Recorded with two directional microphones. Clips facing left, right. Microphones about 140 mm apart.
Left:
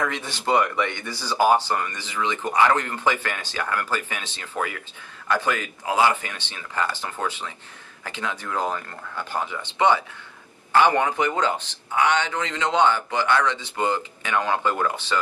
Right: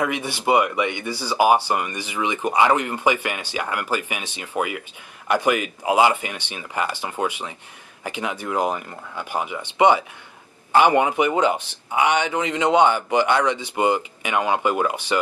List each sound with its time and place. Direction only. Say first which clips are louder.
0.0 s speech: right 4 dB; 10° right (ahead or behind)